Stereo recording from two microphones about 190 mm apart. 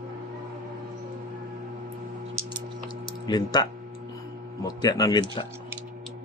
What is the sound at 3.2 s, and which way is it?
Speech, 20° left (ahead or behind).